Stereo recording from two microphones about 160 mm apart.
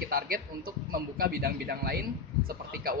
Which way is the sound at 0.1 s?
65° right (ahead or behind).